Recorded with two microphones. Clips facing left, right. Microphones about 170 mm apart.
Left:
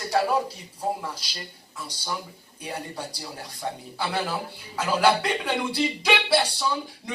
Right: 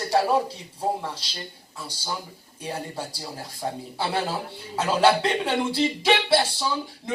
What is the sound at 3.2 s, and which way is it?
Speech, 25° right (ahead or behind).